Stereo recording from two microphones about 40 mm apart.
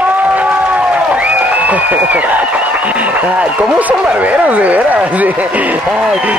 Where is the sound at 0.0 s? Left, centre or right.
Right.